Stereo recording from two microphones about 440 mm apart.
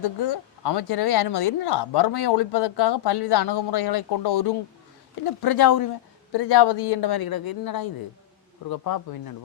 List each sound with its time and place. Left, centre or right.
0.0 s a woman's voice: left
6.3 s a woman's voice: left